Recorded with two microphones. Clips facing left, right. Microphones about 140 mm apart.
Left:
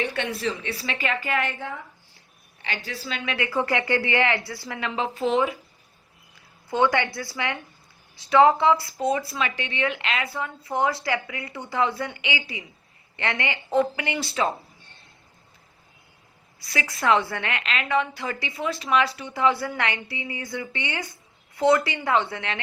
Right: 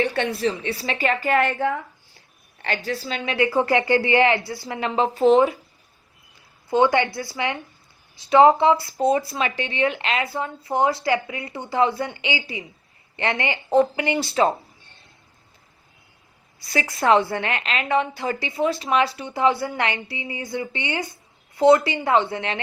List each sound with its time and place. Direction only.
0.0 s a woman's voice: 35° right (ahead or behind); by 1.8 s 60° right (ahead or behind)
2.6 s a woman's voice: 50° right (ahead or behind)
6.7 s a woman's voice: 25° right (ahead or behind)
16.7 s a woman's voice: 30° right (ahead or behind)